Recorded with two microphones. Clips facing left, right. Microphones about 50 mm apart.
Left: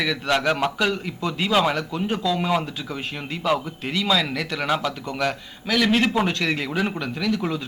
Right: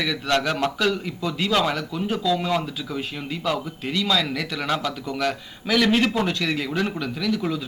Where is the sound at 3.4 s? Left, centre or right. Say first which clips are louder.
Left 3 dB; centre.